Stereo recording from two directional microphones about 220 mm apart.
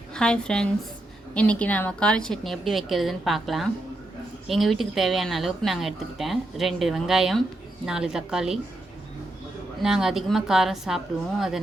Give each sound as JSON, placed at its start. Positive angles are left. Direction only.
{"t": 0.1, "sound": "a woman's voice", "side_deg": 5}
{"t": 9.8, "sound": "speech", "side_deg": 0}